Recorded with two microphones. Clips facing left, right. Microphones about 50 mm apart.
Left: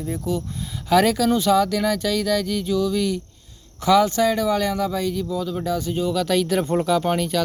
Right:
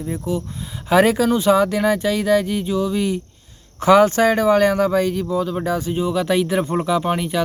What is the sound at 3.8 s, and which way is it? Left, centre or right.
Speech, right.